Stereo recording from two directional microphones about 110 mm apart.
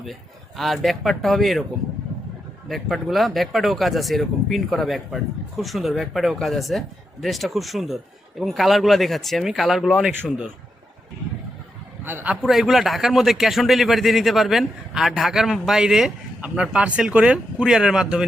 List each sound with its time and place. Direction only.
0.0 s a man's voice: centre (ahead or behind)
2.6 s a man's voice: centre (ahead or behind)
12.0 s a man's voice: 15° right (ahead or behind)
12.4 s a man's voice: centre (ahead or behind)